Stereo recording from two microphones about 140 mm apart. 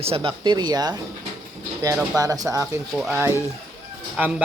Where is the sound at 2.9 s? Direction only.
5° right (ahead or behind).